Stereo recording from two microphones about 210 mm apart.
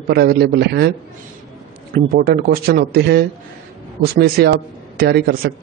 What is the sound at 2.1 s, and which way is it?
Speech, 45° right (ahead or behind).